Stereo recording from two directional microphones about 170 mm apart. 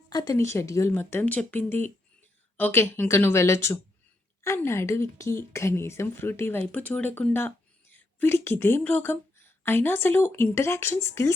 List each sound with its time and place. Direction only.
0.1 s a woman's voice: 20° left (ahead or behind)